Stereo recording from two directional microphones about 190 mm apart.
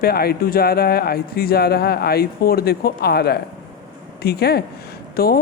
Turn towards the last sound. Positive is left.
turn(degrees=55)  # may be behind; listen again after turning